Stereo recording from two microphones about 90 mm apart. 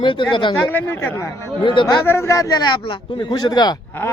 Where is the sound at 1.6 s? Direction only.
60° left (ahead or behind).